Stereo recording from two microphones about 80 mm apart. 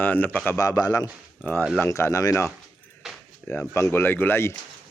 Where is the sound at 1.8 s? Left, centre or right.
Left.